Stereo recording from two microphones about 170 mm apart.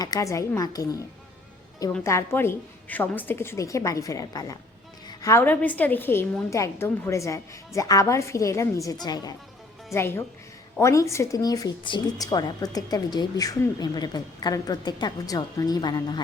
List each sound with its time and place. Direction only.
0.0 s speech: 20° left (ahead or behind)
2.0 s a woman's voice: 15° left (ahead or behind)